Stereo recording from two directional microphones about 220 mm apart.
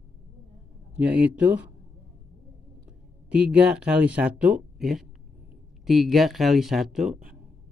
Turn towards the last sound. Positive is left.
turn(degrees=0)  # may be behind; listen again after turning